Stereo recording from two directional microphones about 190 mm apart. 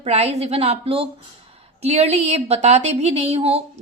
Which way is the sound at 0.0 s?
35° right (ahead or behind).